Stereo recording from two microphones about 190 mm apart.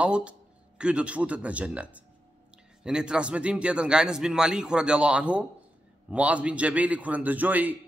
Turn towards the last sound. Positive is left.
turn(degrees=-10)  # may be behind; listen again after turning